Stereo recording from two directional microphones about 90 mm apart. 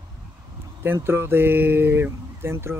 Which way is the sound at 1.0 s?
25° right (ahead or behind).